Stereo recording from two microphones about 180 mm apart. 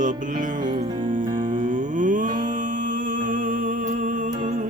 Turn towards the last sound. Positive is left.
turn(degrees=-45)  # may be behind; listen again after turning